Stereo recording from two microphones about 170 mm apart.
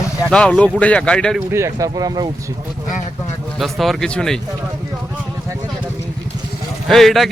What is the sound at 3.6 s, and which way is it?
Speech, centre (ahead or behind).